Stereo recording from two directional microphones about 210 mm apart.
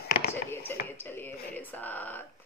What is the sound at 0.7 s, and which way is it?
Speech, 10° left (ahead or behind).